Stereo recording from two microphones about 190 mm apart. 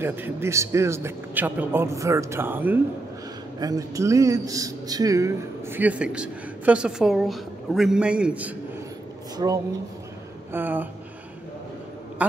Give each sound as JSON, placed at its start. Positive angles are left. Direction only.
{"t": 0.0, "sound": "speech", "side_deg": -10}
{"t": 9.4, "sound": "speech", "side_deg": -25}
{"t": 10.5, "sound": "speech", "side_deg": -10}
{"t": 12.2, "sound": "speech", "side_deg": -5}